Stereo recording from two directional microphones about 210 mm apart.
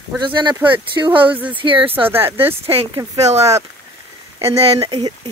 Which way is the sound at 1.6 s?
25° right (ahead or behind).